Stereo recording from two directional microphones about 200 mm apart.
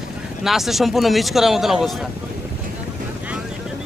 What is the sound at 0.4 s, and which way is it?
Speech, centre (ahead or behind).